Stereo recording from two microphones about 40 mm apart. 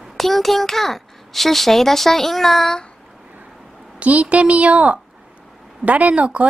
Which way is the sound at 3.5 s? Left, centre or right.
Centre.